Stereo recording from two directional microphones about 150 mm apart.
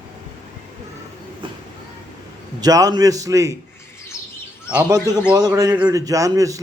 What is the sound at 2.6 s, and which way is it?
Speech, 25° right (ahead or behind).